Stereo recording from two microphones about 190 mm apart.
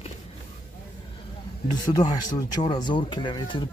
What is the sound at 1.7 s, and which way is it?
Speech, 20° left (ahead or behind).